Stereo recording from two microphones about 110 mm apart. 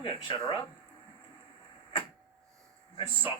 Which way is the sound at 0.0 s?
45° left (ahead or behind).